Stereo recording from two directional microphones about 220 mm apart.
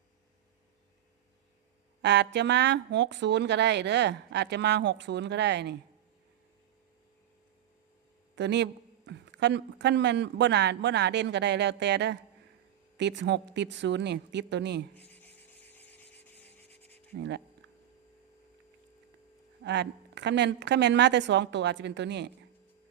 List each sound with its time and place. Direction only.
2.0 s speech: 50° right (ahead or behind)
8.4 s speech: 50° right (ahead or behind)
14.9 s rub: 10° left (ahead or behind)
17.2 s speech: 50° right (ahead or behind)
19.6 s speech: 50° right (ahead or behind)